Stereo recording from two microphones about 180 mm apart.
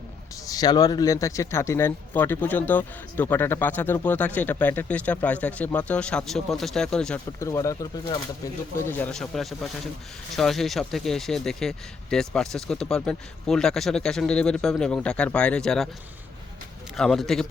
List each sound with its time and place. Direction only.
0.4 s speech: 20° left (ahead or behind); by 7.2 s 5° left (ahead or behind)
7.3 s speech: 15° left (ahead or behind)
17.0 s speech: centre (ahead or behind)